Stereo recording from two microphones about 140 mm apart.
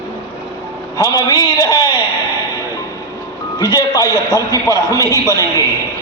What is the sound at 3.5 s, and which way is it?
A man's voice, 30° left (ahead or behind).